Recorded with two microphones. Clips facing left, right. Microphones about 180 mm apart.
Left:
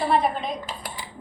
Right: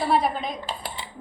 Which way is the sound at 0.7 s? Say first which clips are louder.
Right 2 dB; 30° right (ahead or behind).